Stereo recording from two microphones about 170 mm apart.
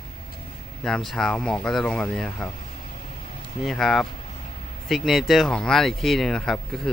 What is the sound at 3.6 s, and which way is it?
Speech, centre (ahead or behind).